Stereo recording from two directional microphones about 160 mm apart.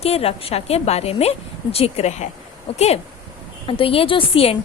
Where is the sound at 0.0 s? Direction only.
40° left (ahead or behind).